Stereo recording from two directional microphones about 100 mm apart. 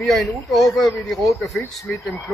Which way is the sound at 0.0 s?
Centre (ahead or behind).